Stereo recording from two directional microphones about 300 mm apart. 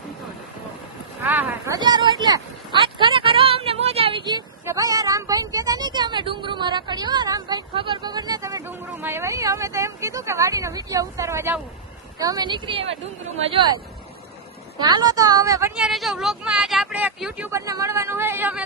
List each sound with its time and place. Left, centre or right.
1.2 s a sound: centre
12.2 s a woman's voice: centre
14.8 s a woman's voice: centre